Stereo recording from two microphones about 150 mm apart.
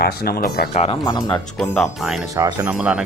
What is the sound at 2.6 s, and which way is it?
Speech, 5° right (ahead or behind).